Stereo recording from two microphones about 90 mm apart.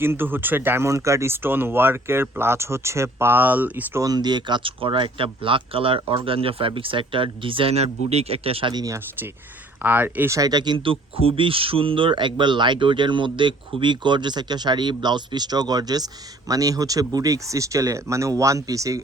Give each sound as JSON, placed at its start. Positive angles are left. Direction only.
{"t": 0.0, "sound": "speech", "side_deg": -25}
{"t": 4.0, "sound": "speech", "side_deg": -50}
{"t": 8.7, "sound": "speech", "side_deg": -45}
{"t": 9.8, "sound": "speech", "side_deg": -20}
{"t": 10.3, "sound": "speech", "side_deg": -45}
{"t": 10.8, "sound": "speech", "side_deg": -80}